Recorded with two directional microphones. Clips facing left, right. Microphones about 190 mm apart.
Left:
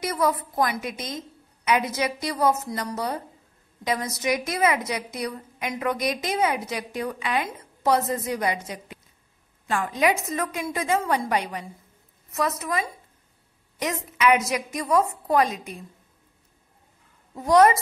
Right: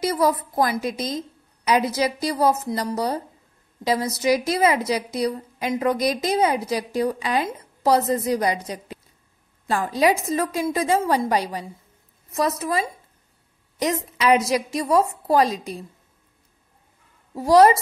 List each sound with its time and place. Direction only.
0.0 s a woman's voice: 35° right (ahead or behind)
17.4 s a woman's voice: 30° right (ahead or behind)